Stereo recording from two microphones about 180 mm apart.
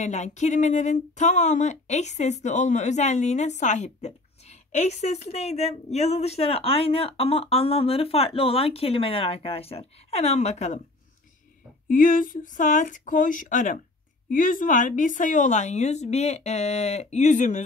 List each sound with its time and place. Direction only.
0.0 s speech: 40° left (ahead or behind)
11.9 s speech: 50° left (ahead or behind)